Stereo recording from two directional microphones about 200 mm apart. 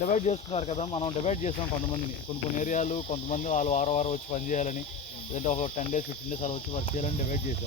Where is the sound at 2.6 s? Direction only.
40° left (ahead or behind).